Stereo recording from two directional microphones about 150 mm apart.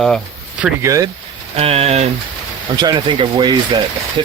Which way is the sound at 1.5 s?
45° right (ahead or behind).